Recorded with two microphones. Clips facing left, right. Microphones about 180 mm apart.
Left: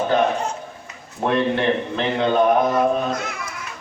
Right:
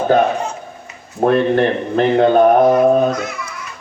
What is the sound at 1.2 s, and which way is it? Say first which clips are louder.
Speech: right 6 dB; 45° right (ahead or behind).